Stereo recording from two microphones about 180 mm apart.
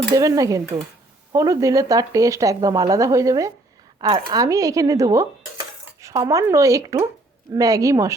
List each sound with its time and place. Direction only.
0.1 s speech: 20° right (ahead or behind)
4.3 s cutlery: 20° right (ahead or behind)
7.5 s speech: 20° right (ahead or behind)